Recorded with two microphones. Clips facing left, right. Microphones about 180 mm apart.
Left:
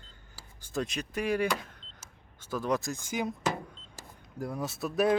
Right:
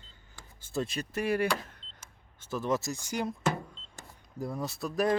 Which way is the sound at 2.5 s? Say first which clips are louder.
Even; centre (ahead or behind).